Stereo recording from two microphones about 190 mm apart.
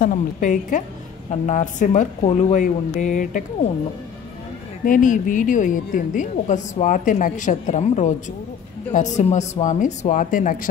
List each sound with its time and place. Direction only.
0.0 s a woman's voice: 40° left (ahead or behind)
4.8 s a woman's voice: 45° left (ahead or behind)